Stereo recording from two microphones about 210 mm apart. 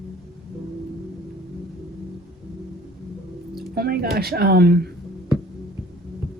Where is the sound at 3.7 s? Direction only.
45° right (ahead or behind).